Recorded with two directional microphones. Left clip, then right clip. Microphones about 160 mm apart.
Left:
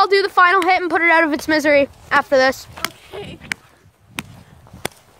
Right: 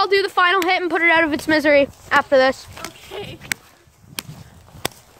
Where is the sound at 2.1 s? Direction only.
45° left (ahead or behind).